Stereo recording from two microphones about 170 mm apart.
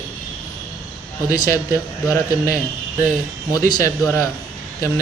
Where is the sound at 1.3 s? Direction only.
20° left (ahead or behind).